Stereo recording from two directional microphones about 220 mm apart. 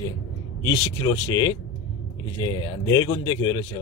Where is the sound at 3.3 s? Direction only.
15° left (ahead or behind).